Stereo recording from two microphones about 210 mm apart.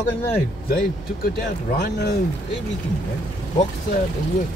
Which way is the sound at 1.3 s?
45° left (ahead or behind).